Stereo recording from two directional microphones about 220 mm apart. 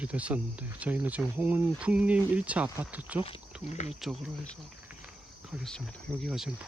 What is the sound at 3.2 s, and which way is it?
Speech, 25° left (ahead or behind).